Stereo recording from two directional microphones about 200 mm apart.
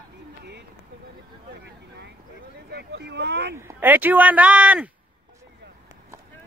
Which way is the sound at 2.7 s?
55° right (ahead or behind).